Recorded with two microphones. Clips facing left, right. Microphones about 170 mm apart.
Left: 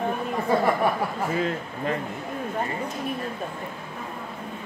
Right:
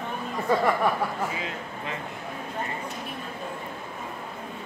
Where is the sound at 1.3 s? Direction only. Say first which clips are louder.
Left 7 dB; 45° left (ahead or behind).